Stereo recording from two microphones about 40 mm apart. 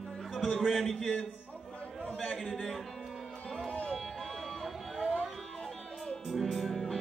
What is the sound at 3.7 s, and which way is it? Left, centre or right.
Music, left.